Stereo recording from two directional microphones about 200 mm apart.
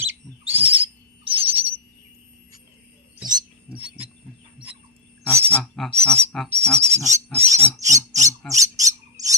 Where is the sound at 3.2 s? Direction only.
20° right (ahead or behind).